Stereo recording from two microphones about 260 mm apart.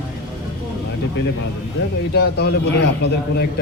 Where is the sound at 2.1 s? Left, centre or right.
Left.